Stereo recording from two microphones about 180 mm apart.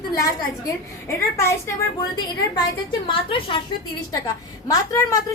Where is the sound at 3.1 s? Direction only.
30° left (ahead or behind).